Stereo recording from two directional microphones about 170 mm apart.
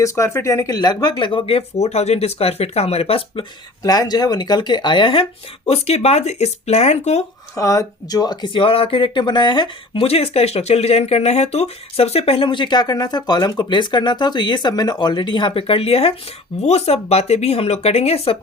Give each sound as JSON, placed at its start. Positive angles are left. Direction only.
{"t": 0.0, "sound": "speech", "side_deg": 15}
{"t": 3.8, "sound": "speech", "side_deg": 20}
{"t": 7.5, "sound": "speech", "side_deg": 20}